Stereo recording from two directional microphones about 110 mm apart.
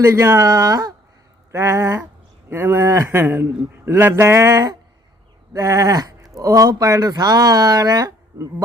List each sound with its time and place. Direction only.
0.0 s speech: 25° right (ahead or behind)